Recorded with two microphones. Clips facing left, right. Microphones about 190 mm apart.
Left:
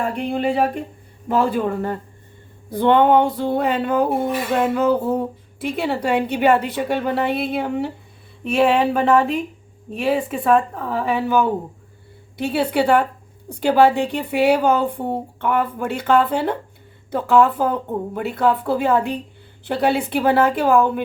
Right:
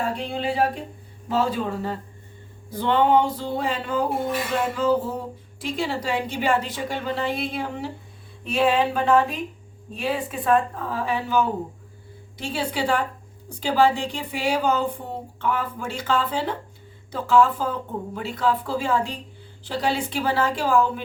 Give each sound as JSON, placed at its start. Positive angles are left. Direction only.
{"t": 0.2, "sound": "speech", "side_deg": 55}